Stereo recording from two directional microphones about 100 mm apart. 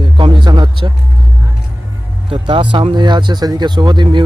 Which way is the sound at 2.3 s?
55° right (ahead or behind).